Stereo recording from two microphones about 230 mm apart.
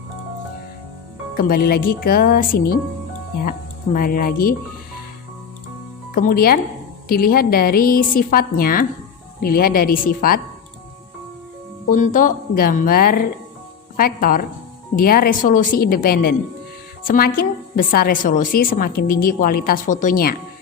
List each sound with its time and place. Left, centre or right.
1.4 s a woman's voice: left
3.9 s a woman's voice: left
6.1 s a woman's voice: left
11.9 s a woman's voice: left